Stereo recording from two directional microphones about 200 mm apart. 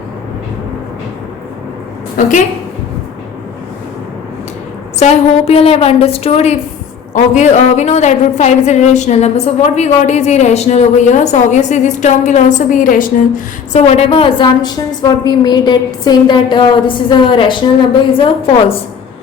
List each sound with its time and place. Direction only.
2.2 s a woman's voice: 40° left (ahead or behind)
4.9 s a woman's voice: 30° left (ahead or behind)